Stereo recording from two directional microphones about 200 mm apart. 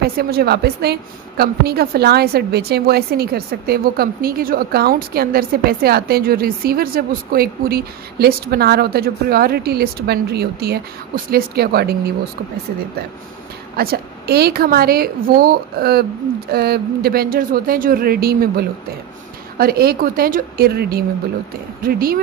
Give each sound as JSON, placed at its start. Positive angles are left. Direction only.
{"t": 0.0, "sound": "a woman's voice", "side_deg": -50}
{"t": 13.7, "sound": "a woman's voice", "side_deg": -50}